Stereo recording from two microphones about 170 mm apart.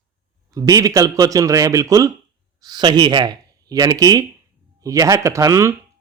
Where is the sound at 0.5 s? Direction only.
20° right (ahead or behind).